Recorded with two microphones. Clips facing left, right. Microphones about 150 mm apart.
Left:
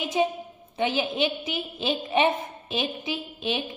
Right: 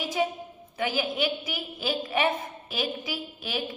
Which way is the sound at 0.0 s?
20° left (ahead or behind).